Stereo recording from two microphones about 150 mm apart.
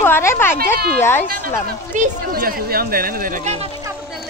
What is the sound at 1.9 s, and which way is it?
Speech, 75° right (ahead or behind).